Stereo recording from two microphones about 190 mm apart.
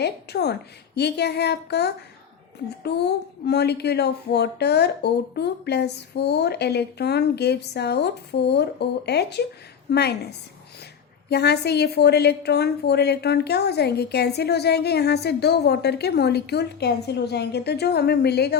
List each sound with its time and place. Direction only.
0.0 s a woman's voice: 60° left (ahead or behind)
11.3 s a woman's voice: 60° left (ahead or behind)